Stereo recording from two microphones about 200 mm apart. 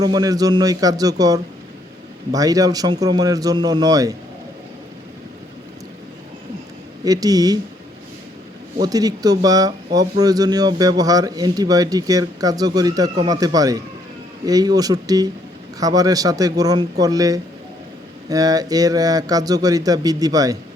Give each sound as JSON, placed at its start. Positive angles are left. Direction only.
{"t": 0.0, "sound": "speech", "side_deg": -20}
{"t": 7.0, "sound": "speech", "side_deg": -20}
{"t": 8.8, "sound": "speech", "side_deg": -20}